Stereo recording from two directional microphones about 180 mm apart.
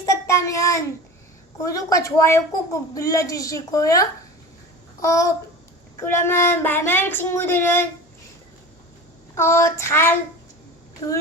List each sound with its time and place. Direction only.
0.1 s child singing: 15° left (ahead or behind)
1.6 s a woman's voice: 20° left (ahead or behind)
4.9 s babbling: 20° left (ahead or behind)
6.0 s a woman's voice: 15° left (ahead or behind)
9.3 s a woman's voice: 15° left (ahead or behind)